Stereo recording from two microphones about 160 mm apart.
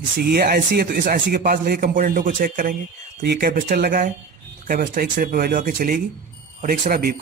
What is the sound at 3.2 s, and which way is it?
A man's voice, 80° right.